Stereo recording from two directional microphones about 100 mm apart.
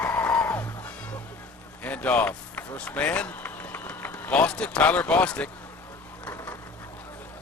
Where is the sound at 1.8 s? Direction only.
15° left (ahead or behind).